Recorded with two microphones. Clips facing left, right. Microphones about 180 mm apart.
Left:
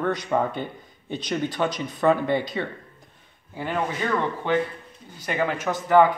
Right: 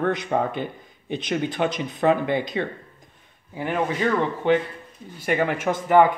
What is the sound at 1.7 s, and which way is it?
Speech, 20° right (ahead or behind).